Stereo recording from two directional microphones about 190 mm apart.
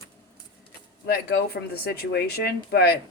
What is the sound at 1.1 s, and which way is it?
Speech, 55° left (ahead or behind).